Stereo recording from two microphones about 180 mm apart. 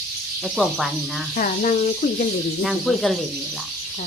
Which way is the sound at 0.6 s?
Centre (ahead or behind).